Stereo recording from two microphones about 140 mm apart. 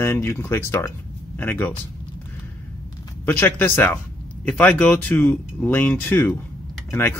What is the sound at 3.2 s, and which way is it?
Speech, 15° left (ahead or behind).